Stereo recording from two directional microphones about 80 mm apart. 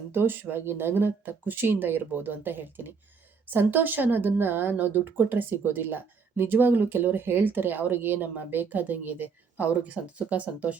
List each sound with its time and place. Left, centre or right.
0.1 s a woman's voice: right